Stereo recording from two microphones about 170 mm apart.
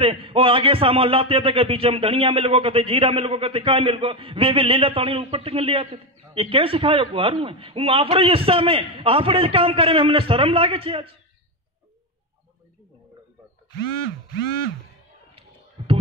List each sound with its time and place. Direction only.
0.0 s a man's voice: 30° right (ahead or behind)